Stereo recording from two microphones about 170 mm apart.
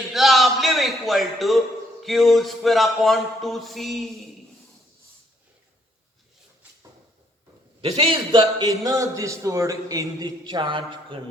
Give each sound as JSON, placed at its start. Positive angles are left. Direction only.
{"t": 0.1, "sound": "a man's voice", "side_deg": 0}
{"t": 7.8, "sound": "a man's voice", "side_deg": -35}